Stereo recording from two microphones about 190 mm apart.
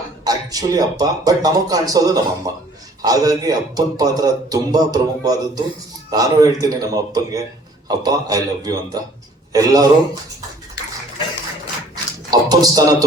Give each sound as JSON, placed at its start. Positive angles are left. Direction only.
{"t": 0.3, "sound": "a man's voice", "side_deg": -20}
{"t": 12.3, "sound": "speech", "side_deg": -20}